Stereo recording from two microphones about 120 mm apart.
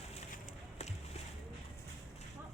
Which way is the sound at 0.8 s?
70° left (ahead or behind).